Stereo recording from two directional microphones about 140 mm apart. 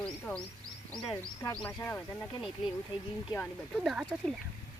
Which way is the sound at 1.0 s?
25° left (ahead or behind).